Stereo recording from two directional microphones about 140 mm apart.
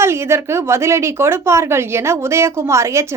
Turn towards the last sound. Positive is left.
turn(degrees=-20)  # may be behind; listen again after turning